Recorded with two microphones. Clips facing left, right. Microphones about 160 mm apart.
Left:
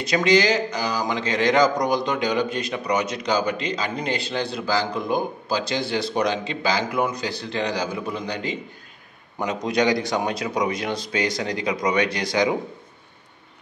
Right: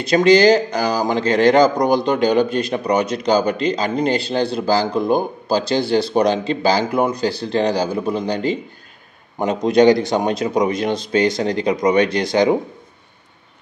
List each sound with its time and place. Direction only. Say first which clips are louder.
0.0 s a man's voice: right 7 dB; 30° right (ahead or behind)
10.4 s speech: right 6 dB; 45° right (ahead or behind)
10.7 s a man's voice: right 7 dB; 25° right (ahead or behind)